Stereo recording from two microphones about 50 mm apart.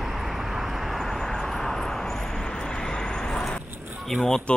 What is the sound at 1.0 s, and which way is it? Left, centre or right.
Vehicle, centre.